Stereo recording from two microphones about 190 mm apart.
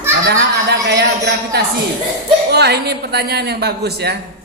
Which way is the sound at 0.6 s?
60° right (ahead or behind).